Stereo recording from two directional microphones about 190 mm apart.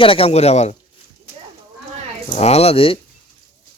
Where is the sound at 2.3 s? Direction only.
30° left (ahead or behind).